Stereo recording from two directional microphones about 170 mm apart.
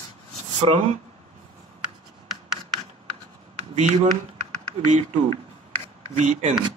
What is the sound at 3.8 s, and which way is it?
Speech, 45° right (ahead or behind).